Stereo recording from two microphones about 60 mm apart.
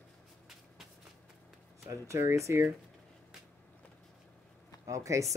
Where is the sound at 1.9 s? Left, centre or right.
Right.